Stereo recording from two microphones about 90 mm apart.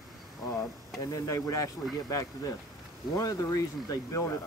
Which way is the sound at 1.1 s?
40° left (ahead or behind).